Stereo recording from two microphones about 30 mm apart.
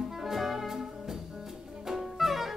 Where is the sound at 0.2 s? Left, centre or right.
Centre.